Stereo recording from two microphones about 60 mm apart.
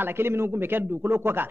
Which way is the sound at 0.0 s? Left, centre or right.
Right.